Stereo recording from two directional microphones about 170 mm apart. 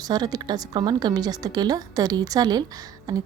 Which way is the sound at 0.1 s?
25° right (ahead or behind).